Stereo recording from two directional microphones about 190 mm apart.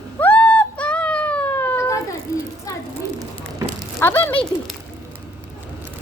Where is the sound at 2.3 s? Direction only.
15° left (ahead or behind).